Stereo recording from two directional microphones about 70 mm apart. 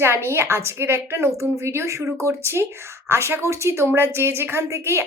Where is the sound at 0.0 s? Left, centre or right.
Right.